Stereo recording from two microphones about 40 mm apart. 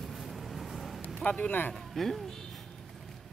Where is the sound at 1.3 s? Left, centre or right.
Left.